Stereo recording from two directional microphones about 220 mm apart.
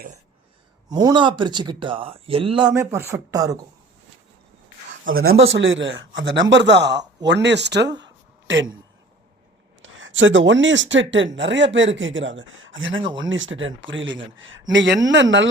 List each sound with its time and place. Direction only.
0.9 s speech: 20° right (ahead or behind)
2.6 s speech: 10° right (ahead or behind)
5.0 s speech: 70° right (ahead or behind)
9.8 s speech: 60° right (ahead or behind)